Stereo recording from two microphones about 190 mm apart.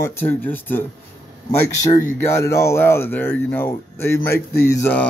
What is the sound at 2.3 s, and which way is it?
Speech, 15° left (ahead or behind).